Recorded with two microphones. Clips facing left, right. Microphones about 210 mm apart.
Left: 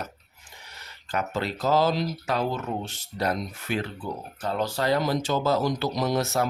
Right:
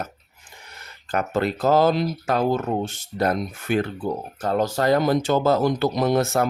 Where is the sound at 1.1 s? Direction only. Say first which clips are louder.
Right 6 dB; 50° right (ahead or behind).